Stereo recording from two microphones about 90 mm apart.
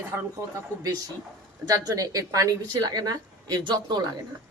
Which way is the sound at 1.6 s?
40° right (ahead or behind).